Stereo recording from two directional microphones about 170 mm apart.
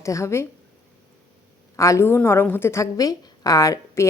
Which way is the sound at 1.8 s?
15° left (ahead or behind).